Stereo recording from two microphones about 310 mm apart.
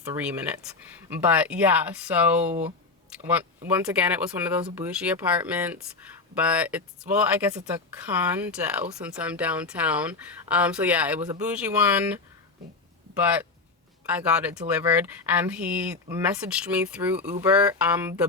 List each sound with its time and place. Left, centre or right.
0.0 s speech: centre
2.5 s speech: right
3.7 s speech: centre
13.2 s speech: centre